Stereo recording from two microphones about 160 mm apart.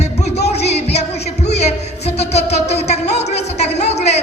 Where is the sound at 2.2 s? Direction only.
40° left (ahead or behind).